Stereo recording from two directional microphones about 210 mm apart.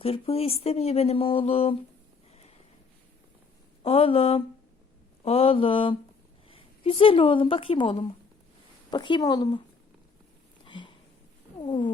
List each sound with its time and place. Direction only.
0.0 s speech: 30° left (ahead or behind)
3.8 s speech: 25° left (ahead or behind)
10.7 s a sound: 20° left (ahead or behind)
11.6 s speech: 20° left (ahead or behind)